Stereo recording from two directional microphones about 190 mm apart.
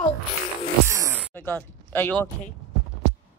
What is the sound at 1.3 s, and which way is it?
Speech, 10° left (ahead or behind).